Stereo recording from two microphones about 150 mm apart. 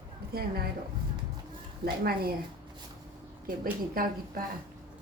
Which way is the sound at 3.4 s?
75° right (ahead or behind).